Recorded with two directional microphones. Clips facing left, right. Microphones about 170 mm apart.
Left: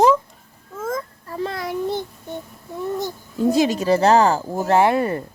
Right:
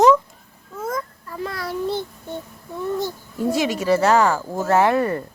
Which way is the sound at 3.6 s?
35° left (ahead or behind).